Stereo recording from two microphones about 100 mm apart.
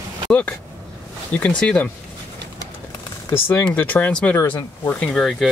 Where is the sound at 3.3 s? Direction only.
25° left (ahead or behind); by 5.5 s 5° left (ahead or behind).